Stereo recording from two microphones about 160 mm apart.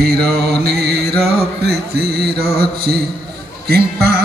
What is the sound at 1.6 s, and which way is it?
Music, 80° right.